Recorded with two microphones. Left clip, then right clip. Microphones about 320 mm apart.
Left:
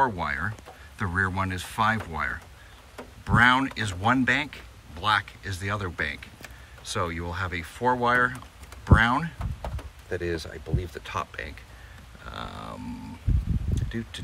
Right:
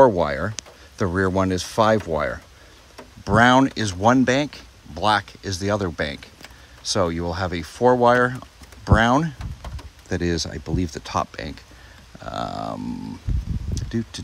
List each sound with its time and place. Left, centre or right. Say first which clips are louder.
0.0 s speech: right 9 dB; centre